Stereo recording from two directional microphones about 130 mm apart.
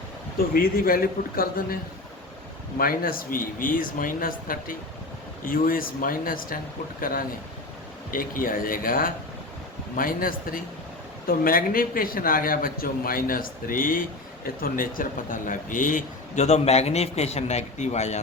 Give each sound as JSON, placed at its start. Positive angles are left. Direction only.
{"t": 0.8, "sound": "a man's voice", "side_deg": 90}
{"t": 8.1, "sound": "a man's voice", "side_deg": 90}